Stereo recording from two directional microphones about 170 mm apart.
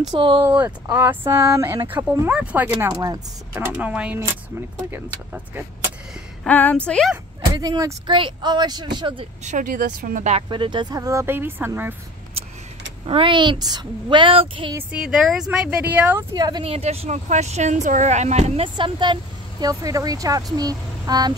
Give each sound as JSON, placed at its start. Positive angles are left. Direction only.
{"t": 0.1, "sound": "a woman's voice", "side_deg": -30}
{"t": 0.5, "sound": "speech", "side_deg": -10}
{"t": 6.4, "sound": "a woman's voice", "side_deg": 10}
{"t": 7.5, "sound": "a woman's voice", "side_deg": -25}
{"t": 9.4, "sound": "speech", "side_deg": -45}
{"t": 10.5, "sound": "speech", "side_deg": -30}
{"t": 13.0, "sound": "a woman's voice", "side_deg": -30}
{"t": 14.7, "sound": "speech", "side_deg": -10}
{"t": 16.2, "sound": "a woman's voice", "side_deg": -25}
{"t": 16.6, "sound": "speech", "side_deg": -35}
{"t": 18.8, "sound": "a woman's voice", "side_deg": -25}